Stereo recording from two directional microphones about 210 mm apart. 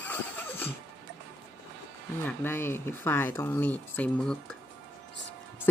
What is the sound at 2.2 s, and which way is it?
Speech, 10° left (ahead or behind).